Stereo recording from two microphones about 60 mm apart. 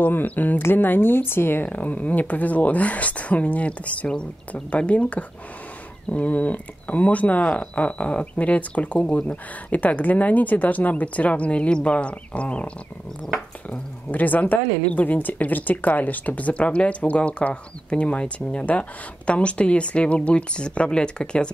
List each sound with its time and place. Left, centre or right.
0.0 s speech: left; by 21.5 s centre